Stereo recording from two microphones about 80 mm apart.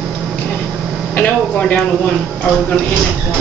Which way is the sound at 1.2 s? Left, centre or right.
Centre.